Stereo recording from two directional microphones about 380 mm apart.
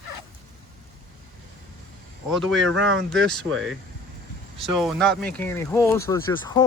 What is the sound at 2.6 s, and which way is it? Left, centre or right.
Speech, right.